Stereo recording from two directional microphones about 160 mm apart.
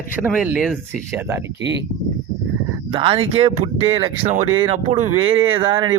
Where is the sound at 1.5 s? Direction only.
90° right.